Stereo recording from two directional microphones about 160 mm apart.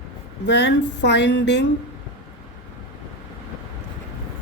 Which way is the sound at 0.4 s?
90° left.